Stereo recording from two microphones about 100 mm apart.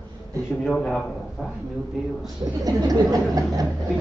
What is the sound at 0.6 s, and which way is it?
Speech, 5° left (ahead or behind).